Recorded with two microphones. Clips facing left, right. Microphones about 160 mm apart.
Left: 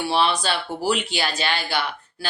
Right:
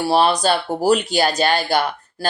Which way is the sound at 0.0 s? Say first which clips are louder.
Right 5 dB; 40° right (ahead or behind).